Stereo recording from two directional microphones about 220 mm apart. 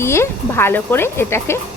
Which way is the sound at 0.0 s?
10° left (ahead or behind).